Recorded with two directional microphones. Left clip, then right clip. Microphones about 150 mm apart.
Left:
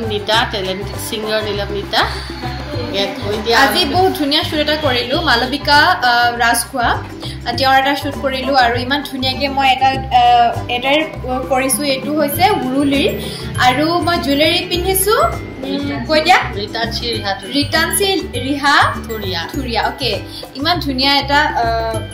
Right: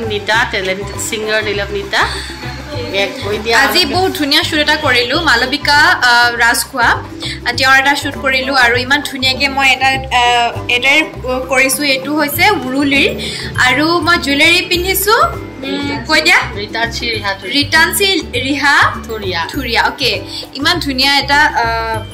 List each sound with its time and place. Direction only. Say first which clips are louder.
0.1 s a woman's voice: right 2 dB; 15° right (ahead or behind)
2.9 s speech: right 3 dB; 40° right (ahead or behind)
4.1 s a woman's voice: right 3 dB; 15° left (ahead or behind)
16.7 s a woman's voice: right 4 dB; 45° right (ahead or behind)
17.5 s a woman's voice: right 6 dB; 10° left (ahead or behind)